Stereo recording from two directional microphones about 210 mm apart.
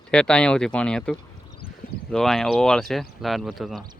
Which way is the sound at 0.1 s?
5° left (ahead or behind).